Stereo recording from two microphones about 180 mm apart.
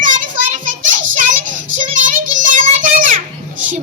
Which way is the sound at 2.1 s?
45° right (ahead or behind).